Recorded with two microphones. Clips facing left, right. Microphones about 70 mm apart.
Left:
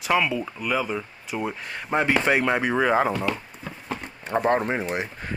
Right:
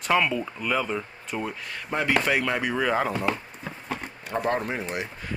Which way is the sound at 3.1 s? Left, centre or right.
Right.